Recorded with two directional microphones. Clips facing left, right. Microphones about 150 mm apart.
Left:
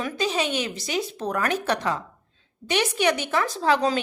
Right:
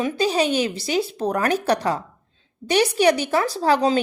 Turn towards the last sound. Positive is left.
turn(degrees=-35)  # may be behind; listen again after turning